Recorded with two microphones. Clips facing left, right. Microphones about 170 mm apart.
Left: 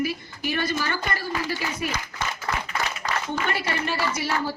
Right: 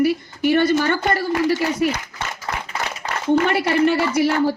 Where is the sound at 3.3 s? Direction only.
65° right (ahead or behind).